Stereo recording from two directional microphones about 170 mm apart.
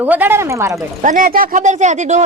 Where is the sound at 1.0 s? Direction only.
50° right (ahead or behind).